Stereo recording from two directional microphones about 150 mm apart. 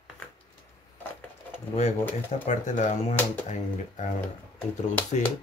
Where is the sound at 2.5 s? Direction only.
55° left (ahead or behind).